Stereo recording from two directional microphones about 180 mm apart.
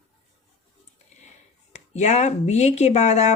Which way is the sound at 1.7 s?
40° left (ahead or behind).